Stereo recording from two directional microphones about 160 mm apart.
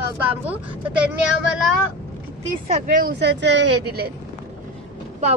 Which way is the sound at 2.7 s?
60° right (ahead or behind).